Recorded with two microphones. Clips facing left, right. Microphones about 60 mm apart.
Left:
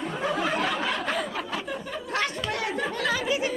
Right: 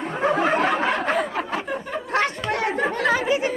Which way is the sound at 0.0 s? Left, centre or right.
Right.